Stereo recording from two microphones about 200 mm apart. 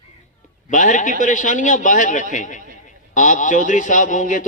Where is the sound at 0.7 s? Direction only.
40° left (ahead or behind).